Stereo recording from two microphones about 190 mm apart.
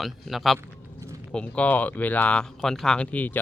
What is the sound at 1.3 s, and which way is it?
Speech, 5° left (ahead or behind).